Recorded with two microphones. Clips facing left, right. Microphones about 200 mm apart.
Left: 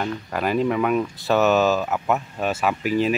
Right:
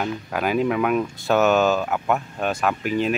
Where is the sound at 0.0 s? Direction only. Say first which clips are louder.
Even; centre (ahead or behind).